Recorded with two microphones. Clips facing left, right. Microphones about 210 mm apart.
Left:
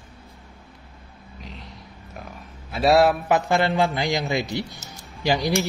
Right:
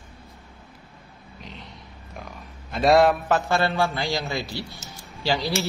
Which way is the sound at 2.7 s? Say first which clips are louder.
Even; 5° left (ahead or behind).